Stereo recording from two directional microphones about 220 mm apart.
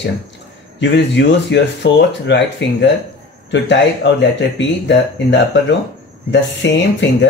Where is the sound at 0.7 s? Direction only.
55° left (ahead or behind).